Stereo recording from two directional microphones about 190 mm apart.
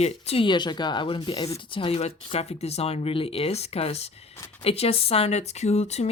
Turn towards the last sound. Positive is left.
turn(degrees=35)  # may be behind; listen again after turning